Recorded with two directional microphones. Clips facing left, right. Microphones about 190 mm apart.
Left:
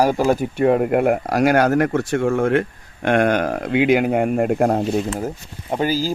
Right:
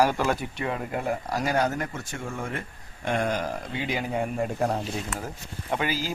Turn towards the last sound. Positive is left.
turn(degrees=35)  # may be behind; listen again after turning